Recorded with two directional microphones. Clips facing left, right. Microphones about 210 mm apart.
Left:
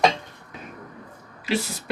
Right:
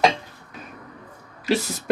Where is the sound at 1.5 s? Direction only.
40° right (ahead or behind).